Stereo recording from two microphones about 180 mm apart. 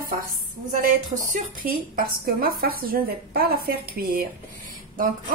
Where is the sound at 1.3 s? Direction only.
50° right (ahead or behind).